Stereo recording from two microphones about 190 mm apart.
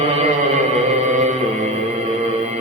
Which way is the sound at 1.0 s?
40° right (ahead or behind).